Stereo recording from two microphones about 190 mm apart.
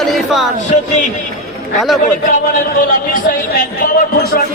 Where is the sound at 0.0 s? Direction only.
Centre (ahead or behind).